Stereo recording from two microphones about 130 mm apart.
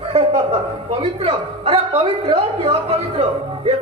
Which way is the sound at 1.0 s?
45° right (ahead or behind).